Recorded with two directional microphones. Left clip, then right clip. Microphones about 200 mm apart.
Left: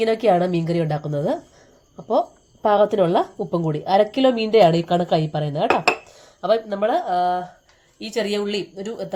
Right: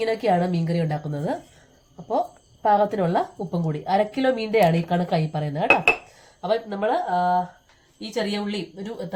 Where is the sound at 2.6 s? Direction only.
40° left (ahead or behind).